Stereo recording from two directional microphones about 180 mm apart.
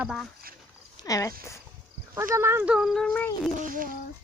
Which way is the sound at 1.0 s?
20° left (ahead or behind).